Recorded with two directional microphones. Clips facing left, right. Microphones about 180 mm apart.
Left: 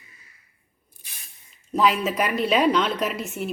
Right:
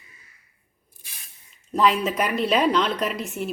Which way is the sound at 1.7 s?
Centre (ahead or behind).